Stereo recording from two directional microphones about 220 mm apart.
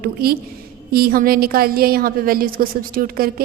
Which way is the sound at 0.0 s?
45° right (ahead or behind).